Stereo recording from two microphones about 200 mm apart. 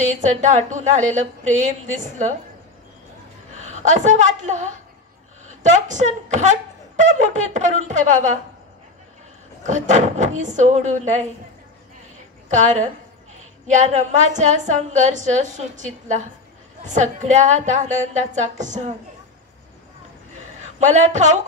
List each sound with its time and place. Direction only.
0.1 s speech: 35° right (ahead or behind)
3.5 s a woman's voice: 35° right (ahead or behind)
9.6 s speech: 35° right (ahead or behind)
12.4 s speech: 35° right (ahead or behind)
20.6 s a woman's voice: 35° right (ahead or behind)